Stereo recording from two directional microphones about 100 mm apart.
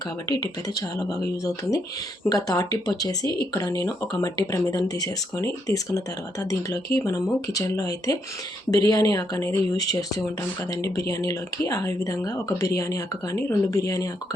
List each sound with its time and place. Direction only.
0.3 s speech: 40° left (ahead or behind)